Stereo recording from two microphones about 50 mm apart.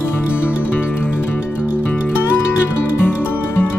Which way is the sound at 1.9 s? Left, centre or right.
Left.